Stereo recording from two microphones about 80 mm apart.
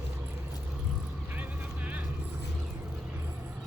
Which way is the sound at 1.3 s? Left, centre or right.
Centre.